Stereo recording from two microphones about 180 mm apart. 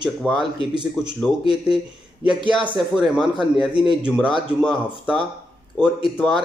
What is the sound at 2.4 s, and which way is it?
Speech, 25° right (ahead or behind).